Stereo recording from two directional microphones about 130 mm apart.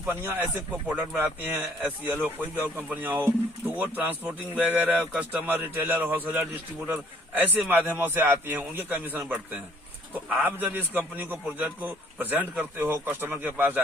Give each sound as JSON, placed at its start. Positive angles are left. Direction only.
{"t": 0.1, "sound": "speech", "side_deg": -15}